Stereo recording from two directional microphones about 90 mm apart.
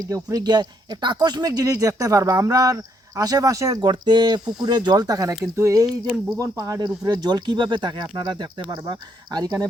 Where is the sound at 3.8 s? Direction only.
55° right (ahead or behind); by 5.9 s 35° right (ahead or behind).